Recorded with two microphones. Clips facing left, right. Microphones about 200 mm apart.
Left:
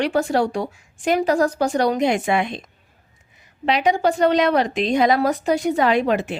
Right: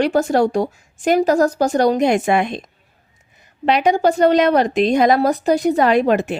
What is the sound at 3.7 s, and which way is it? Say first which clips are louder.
A woman's voice: right 3 dB; 45° right (ahead or behind).